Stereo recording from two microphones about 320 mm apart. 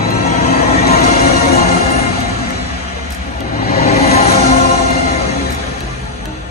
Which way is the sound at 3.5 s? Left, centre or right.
Left.